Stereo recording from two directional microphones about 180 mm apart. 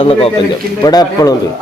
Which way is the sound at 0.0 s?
30° left (ahead or behind).